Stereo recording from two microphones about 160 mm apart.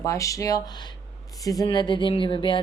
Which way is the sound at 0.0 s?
20° left (ahead or behind).